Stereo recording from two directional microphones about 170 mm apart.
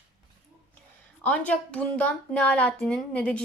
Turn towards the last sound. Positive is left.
turn(degrees=5)  # may be behind; listen again after turning